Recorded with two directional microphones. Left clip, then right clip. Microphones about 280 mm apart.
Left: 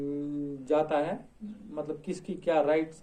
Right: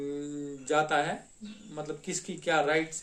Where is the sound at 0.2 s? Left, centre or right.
Right.